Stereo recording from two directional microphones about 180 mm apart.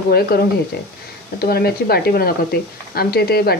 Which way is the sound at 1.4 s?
60° left (ahead or behind).